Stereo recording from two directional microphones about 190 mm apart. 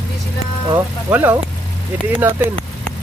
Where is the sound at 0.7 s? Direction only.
15° right (ahead or behind).